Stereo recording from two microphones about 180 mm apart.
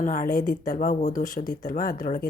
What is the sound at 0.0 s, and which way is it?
A woman's voice, 45° left (ahead or behind).